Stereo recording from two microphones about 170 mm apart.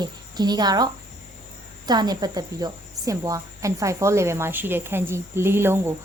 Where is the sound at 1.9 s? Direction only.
25° right (ahead or behind).